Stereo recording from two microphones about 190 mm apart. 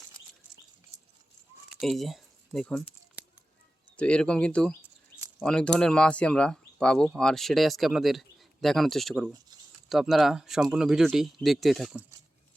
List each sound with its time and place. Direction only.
1.7 s speech: centre (ahead or behind)
3.9 s speech: 5° left (ahead or behind)